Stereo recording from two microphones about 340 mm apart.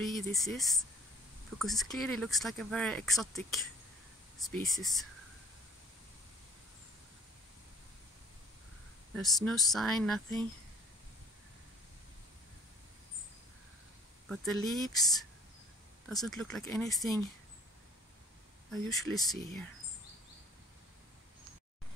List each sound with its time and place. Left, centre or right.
0.0 s speech: centre
9.1 s speech: centre
14.3 s speech: centre
18.7 s speech: centre